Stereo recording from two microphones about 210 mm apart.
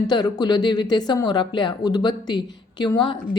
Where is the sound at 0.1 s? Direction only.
20° left (ahead or behind).